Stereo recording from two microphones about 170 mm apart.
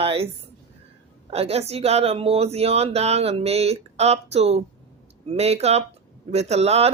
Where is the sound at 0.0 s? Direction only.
35° right (ahead or behind).